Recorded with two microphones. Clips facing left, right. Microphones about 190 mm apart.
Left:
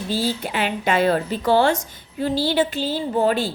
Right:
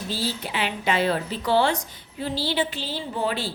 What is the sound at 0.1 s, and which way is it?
A woman's voice, 50° left (ahead or behind).